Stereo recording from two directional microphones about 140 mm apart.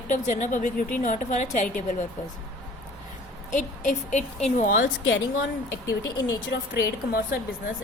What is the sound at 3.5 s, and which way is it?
A woman's voice, 60° left (ahead or behind).